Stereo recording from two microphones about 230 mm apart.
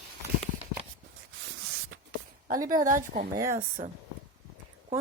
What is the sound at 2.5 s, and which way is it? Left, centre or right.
Speech, right.